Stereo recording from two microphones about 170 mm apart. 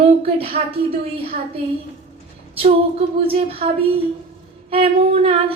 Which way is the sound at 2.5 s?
35° right (ahead or behind).